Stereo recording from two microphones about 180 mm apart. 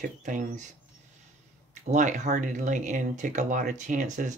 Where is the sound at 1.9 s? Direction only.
40° right (ahead or behind).